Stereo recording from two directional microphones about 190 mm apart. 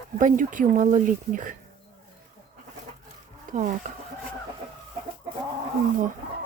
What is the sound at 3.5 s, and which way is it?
Chicken, 45° right (ahead or behind).